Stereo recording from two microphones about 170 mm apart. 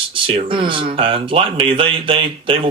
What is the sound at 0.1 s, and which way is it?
Speech, 30° right (ahead or behind).